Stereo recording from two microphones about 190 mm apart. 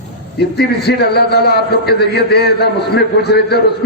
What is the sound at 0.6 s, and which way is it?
A man's voice, 55° left (ahead or behind).